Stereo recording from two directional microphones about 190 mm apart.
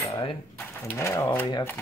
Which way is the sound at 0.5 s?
15° left (ahead or behind).